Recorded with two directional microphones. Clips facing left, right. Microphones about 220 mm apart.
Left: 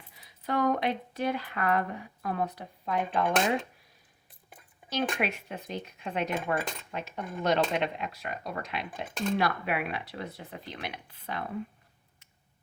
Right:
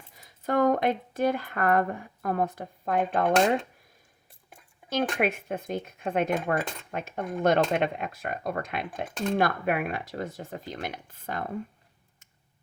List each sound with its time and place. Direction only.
0.1 s speech: 45° right (ahead or behind)
4.9 s speech: 50° right (ahead or behind)